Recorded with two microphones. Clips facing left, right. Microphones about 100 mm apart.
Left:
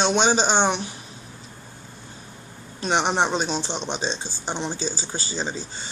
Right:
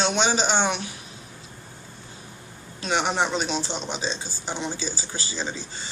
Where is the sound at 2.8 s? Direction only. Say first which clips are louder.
Left 2 dB; 25° left (ahead or behind).